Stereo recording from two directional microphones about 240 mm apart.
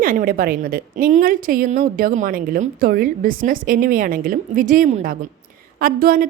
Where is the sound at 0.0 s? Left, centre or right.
Right.